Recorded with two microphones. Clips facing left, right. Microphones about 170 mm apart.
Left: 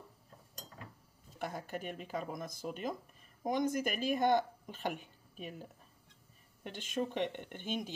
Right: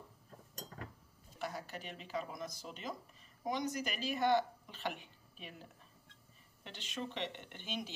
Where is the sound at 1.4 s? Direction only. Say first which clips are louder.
Left 3 dB; 50° left (ahead or behind).